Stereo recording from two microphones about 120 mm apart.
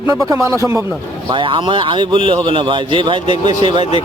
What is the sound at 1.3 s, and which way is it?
A man's voice, 45° right (ahead or behind).